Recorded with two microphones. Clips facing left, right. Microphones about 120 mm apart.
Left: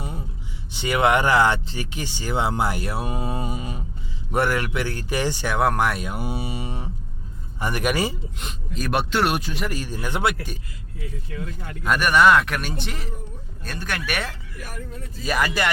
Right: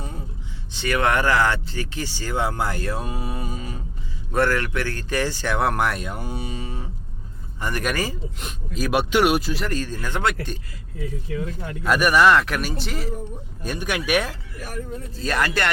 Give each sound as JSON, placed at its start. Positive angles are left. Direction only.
{"t": 0.7, "sound": "speech", "side_deg": 15}
{"t": 3.2, "sound": "music", "side_deg": 25}
{"t": 3.5, "sound": "a sound", "side_deg": 15}
{"t": 4.3, "sound": "speech", "side_deg": 15}
{"t": 5.5, "sound": "speech", "side_deg": 0}
{"t": 8.4, "sound": "speech", "side_deg": -5}
{"t": 9.6, "sound": "speech", "side_deg": 15}
{"t": 11.8, "sound": "speech", "side_deg": -5}
{"t": 13.6, "sound": "speech", "side_deg": -10}
{"t": 15.2, "sound": "speech", "side_deg": 5}